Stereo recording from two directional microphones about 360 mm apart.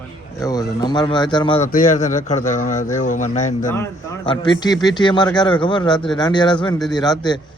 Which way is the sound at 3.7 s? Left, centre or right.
Centre.